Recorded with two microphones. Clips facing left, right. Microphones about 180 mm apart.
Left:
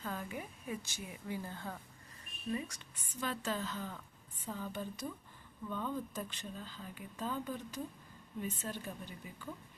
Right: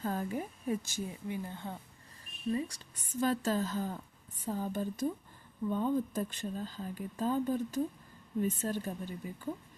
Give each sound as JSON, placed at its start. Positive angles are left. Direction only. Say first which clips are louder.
{"t": 0.0, "sound": "a woman's voice", "louder": "right 7 dB", "side_deg": -40}
{"t": 1.3, "sound": "speech", "louder": "right 3 dB", "side_deg": -20}
{"t": 2.5, "sound": "a woman's voice", "louder": "right 5 dB", "side_deg": -30}